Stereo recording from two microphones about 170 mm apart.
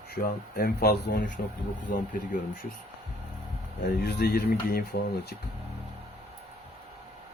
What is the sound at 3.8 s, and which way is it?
Speech, 70° left (ahead or behind).